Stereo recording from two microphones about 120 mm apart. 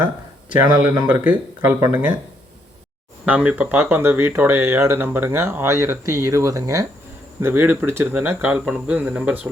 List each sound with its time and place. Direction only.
0.5 s speech: 15° right (ahead or behind)
3.2 s speech: 10° right (ahead or behind); by 6.8 s 25° right (ahead or behind)
7.4 s speech: 15° right (ahead or behind)